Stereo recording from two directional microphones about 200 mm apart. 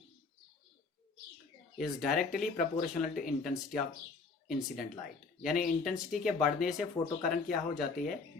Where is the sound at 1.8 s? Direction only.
Centre (ahead or behind).